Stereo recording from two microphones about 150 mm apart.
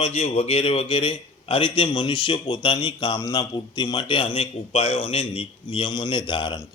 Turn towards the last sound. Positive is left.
turn(degrees=30)  # may be behind; listen again after turning